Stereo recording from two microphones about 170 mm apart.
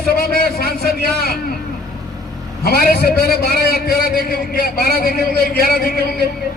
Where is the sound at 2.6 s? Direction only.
65° left (ahead or behind).